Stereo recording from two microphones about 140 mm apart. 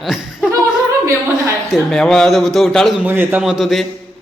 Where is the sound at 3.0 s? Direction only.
15° right (ahead or behind).